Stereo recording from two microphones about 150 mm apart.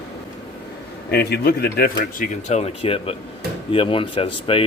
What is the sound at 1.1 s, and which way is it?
Speech, 90° left.